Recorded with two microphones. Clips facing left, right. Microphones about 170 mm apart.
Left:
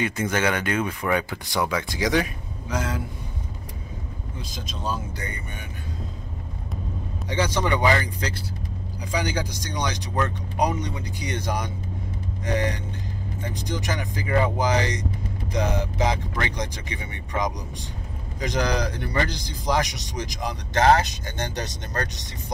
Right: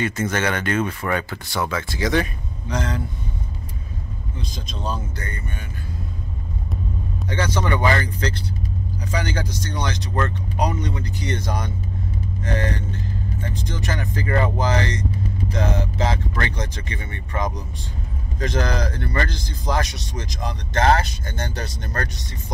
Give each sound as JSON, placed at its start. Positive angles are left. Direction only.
{"t": 0.0, "sound": "speech", "side_deg": 15}
{"t": 4.4, "sound": "speech", "side_deg": 5}
{"t": 7.2, "sound": "speech", "side_deg": 15}